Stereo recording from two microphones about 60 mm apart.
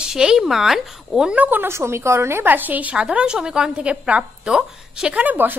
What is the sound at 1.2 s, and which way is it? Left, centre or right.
Speech, right.